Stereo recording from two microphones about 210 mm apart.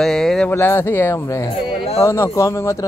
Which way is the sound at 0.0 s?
Centre (ahead or behind).